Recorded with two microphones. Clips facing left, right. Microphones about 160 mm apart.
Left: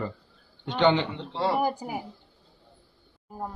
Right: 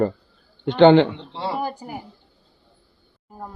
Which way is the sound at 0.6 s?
65° right (ahead or behind).